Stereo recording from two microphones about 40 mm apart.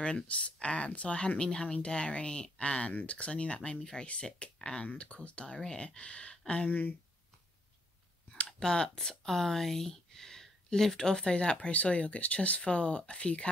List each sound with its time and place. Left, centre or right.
0.0 s speech: left
4.6 s speech: centre
4.8 s speech: left
8.5 s speech: centre